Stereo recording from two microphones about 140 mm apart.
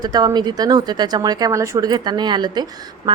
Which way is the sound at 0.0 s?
30° right (ahead or behind).